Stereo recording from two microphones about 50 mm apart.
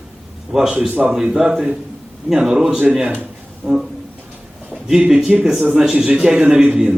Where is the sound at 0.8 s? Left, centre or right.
Right.